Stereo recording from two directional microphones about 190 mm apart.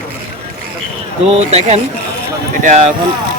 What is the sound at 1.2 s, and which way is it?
Speech, 35° right (ahead or behind).